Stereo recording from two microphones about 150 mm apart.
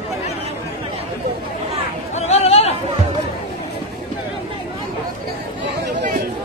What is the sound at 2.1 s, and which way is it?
Chatter, 45° left (ahead or behind).